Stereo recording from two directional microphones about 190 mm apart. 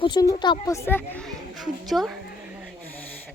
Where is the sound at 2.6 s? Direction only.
Centre (ahead or behind).